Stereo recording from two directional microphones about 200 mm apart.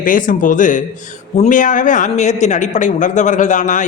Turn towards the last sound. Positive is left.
turn(degrees=40)  # may be behind; listen again after turning